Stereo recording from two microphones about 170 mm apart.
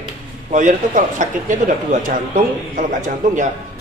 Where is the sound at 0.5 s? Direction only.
50° right (ahead or behind).